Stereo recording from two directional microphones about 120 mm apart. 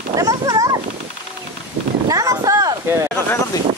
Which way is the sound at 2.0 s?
30° right (ahead or behind).